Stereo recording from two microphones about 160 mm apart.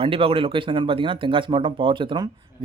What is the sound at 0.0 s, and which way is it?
Speech, 35° right (ahead or behind).